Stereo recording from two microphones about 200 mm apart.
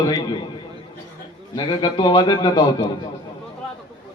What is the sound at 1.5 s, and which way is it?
A man's voice, 20° left (ahead or behind).